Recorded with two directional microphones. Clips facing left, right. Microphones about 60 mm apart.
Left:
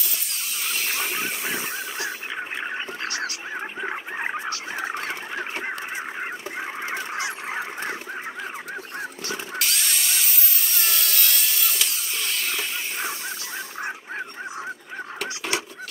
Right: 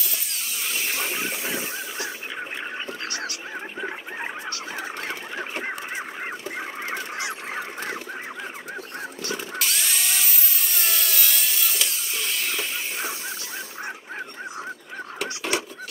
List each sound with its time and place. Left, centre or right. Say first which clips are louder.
0.3 s dental drill: left 1 dB; centre
2.6 s a sound: left 2 dB; left
3.5 s fowl: left 3 dB; centre
9.6 s wood: left 1 dB; centre